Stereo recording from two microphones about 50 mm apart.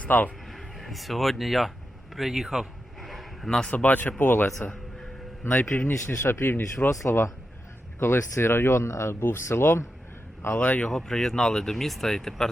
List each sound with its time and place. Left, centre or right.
0.0 s a man's voice: left
0.4 s speech: centre
2.1 s a sound: centre
3.7 s speech: left
4.2 s speech: left
7.0 s speech: left
10.5 s speech: left
10.8 s speech: centre